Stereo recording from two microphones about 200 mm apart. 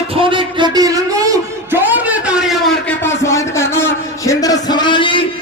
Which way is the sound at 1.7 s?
5° right (ahead or behind).